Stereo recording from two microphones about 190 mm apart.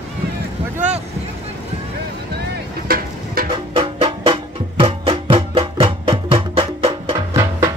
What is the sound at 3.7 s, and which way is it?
Music, 30° right (ahead or behind).